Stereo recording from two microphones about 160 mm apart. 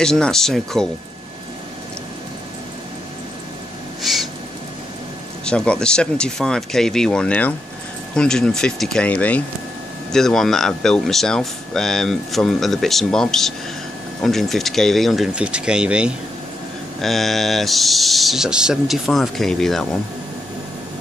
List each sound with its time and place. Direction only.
0.0 s speech: 5° left (ahead or behind)
4.0 s a sound: centre (ahead or behind)
5.4 s speech: 5° left (ahead or behind)